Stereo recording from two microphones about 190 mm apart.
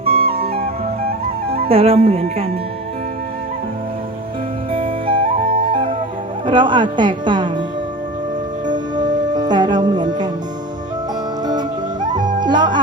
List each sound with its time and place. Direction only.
0.0 s music: 30° right (ahead or behind)
1.5 s speech: 30° right (ahead or behind)
4.7 s flute: 30° right (ahead or behind)
6.4 s speech: 25° right (ahead or behind)
8.6 s music: 25° right (ahead or behind)
12.4 s speech: 25° right (ahead or behind)